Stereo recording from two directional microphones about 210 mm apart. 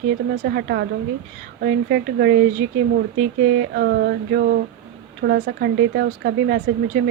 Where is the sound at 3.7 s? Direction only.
50° right (ahead or behind).